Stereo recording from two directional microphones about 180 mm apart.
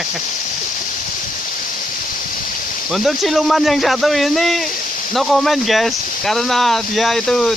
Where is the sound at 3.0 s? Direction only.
Centre (ahead or behind).